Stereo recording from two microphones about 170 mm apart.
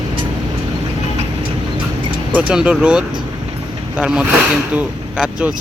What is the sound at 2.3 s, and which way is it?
Speech, 5° right (ahead or behind).